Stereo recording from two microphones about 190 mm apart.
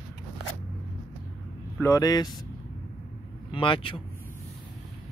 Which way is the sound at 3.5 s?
25° left (ahead or behind).